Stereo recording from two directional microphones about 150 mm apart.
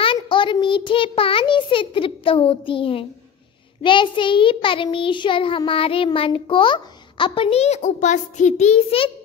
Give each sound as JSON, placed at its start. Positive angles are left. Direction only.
{"t": 0.0, "sound": "a child's voice", "side_deg": 35}